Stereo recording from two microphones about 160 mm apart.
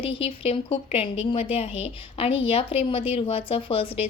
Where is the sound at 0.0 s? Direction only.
35° left (ahead or behind).